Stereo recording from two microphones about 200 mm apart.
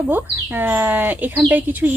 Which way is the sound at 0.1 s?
10° right (ahead or behind).